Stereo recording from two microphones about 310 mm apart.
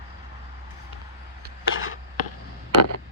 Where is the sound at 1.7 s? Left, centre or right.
Left.